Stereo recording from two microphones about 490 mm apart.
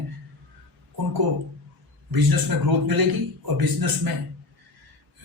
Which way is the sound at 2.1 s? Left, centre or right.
Right.